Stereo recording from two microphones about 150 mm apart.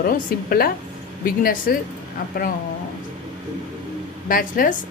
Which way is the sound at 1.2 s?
70° left (ahead or behind).